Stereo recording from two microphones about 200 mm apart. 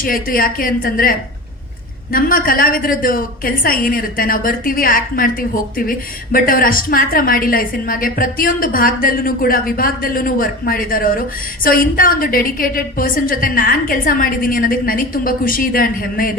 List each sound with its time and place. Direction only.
0.0 s a woman's voice: 45° left (ahead or behind)
2.1 s a woman's voice: 45° left (ahead or behind)